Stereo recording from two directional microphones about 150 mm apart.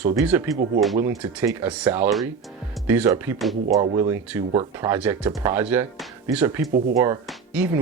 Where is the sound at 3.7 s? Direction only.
25° right (ahead or behind).